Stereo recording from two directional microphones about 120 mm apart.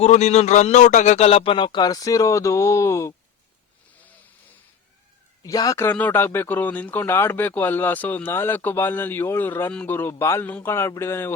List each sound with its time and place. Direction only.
0.0 s a man's voice: 70° left (ahead or behind); by 3.2 s 25° left (ahead or behind)
5.4 s speech: 30° left (ahead or behind)